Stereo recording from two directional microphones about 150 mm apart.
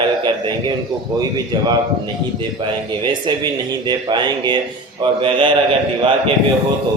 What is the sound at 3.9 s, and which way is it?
A man's voice, 30° right (ahead or behind).